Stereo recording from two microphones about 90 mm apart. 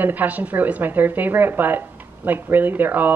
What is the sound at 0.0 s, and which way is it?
Speech, 20° right (ahead or behind).